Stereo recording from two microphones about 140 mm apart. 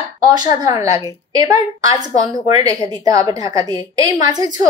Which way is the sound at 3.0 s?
25° right (ahead or behind).